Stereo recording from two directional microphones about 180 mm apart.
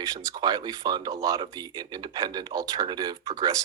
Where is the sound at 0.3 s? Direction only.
25° right (ahead or behind).